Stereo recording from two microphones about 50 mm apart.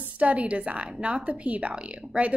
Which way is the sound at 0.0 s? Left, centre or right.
Right.